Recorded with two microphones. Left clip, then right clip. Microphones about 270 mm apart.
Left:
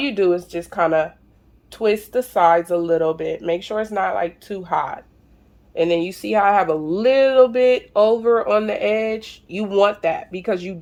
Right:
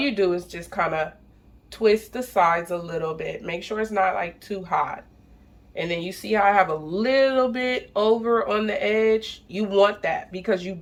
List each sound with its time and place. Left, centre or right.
0.0 s speech: left